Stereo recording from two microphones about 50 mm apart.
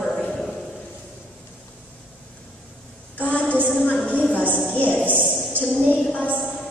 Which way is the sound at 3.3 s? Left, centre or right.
Left.